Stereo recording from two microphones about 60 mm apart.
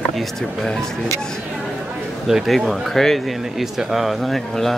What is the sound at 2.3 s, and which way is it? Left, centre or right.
Speech, centre.